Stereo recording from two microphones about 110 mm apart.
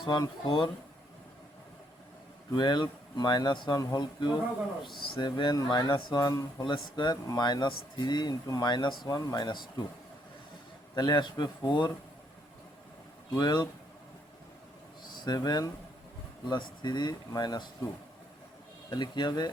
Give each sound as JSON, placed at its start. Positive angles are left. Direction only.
{"t": 0.0, "sound": "speech", "side_deg": 50}
{"t": 2.6, "sound": "speech", "side_deg": 40}
{"t": 10.9, "sound": "speech", "side_deg": 40}
{"t": 13.3, "sound": "speech", "side_deg": 40}
{"t": 15.1, "sound": "speech", "side_deg": 40}
{"t": 18.9, "sound": "speech", "side_deg": 45}